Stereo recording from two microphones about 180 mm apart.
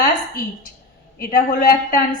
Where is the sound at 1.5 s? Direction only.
50° left (ahead or behind).